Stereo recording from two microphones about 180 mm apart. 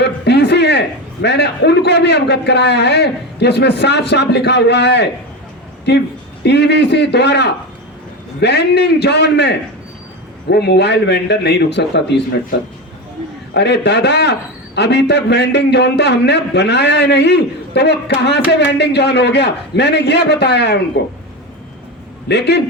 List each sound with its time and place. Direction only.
0.0 s a man's voice: 65° left (ahead or behind)
13.5 s a man's voice: 70° left (ahead or behind)
22.3 s a man's voice: 65° left (ahead or behind)